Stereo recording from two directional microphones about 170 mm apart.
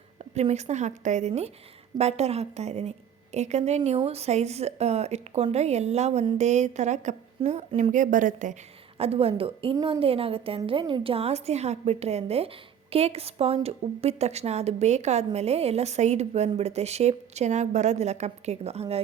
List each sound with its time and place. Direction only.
0.3 s a woman's voice: 40° right (ahead or behind)
9.0 s a woman's voice: 35° right (ahead or behind)